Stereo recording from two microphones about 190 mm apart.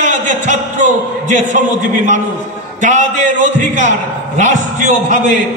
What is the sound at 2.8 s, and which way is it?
A man's voice, 40° right (ahead or behind).